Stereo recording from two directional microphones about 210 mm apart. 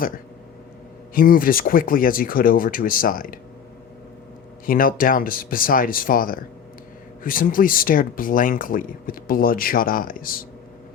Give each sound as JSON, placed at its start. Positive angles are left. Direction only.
{"t": 1.1, "sound": "speech", "side_deg": 40}
{"t": 4.6, "sound": "speech", "side_deg": 40}